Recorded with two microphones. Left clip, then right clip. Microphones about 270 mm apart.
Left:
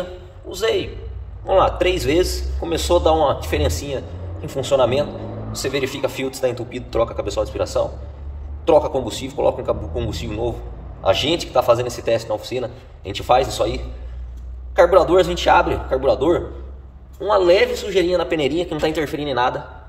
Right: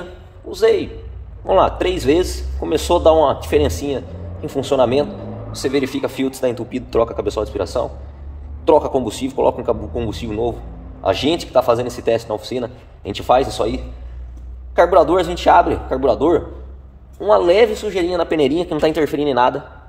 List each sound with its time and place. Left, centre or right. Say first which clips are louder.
0.5 s a man's voice: right 5 dB; right
14.8 s a man's voice: right 1 dB; right